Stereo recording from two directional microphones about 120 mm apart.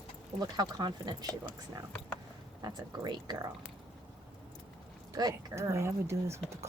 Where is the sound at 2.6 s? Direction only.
35° right (ahead or behind).